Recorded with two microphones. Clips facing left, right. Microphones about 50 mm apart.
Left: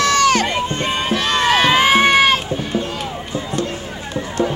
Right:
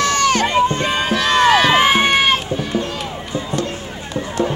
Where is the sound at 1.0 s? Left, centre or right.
Right.